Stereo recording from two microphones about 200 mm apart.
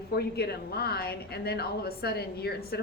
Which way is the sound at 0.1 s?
55° left (ahead or behind).